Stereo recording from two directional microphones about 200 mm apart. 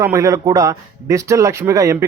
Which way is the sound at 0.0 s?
15° right (ahead or behind).